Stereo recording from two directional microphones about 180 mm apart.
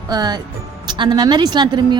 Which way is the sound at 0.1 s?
20° right (ahead or behind).